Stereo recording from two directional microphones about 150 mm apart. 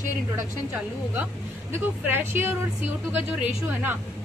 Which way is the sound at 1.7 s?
15° right (ahead or behind).